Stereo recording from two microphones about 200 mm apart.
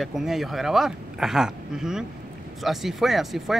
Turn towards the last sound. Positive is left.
turn(degrees=0)  # may be behind; listen again after turning